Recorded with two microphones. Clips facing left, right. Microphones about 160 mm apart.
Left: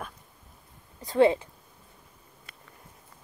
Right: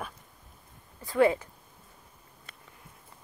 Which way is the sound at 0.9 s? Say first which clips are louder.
Left 2 dB; 25° left (ahead or behind).